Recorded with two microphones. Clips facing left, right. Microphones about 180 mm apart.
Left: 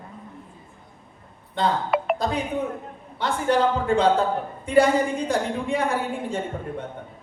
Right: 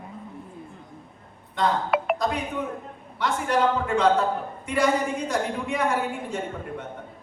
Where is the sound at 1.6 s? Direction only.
30° left (ahead or behind).